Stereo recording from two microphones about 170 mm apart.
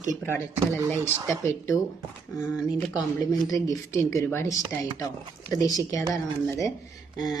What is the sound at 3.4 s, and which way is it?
Speech, 20° left (ahead or behind).